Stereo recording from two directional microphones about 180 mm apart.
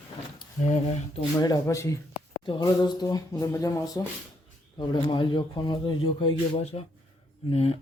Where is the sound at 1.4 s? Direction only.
20° left (ahead or behind).